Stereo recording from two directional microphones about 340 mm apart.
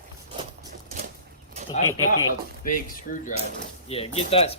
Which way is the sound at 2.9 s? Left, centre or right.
Left.